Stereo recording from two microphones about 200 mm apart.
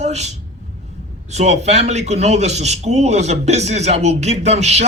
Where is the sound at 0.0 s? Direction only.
35° right (ahead or behind).